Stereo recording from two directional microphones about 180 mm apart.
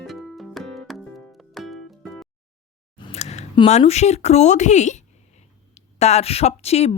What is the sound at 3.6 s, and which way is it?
Speech, 40° left (ahead or behind).